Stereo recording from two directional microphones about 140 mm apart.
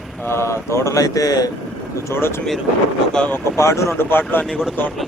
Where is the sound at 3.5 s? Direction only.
20° left (ahead or behind).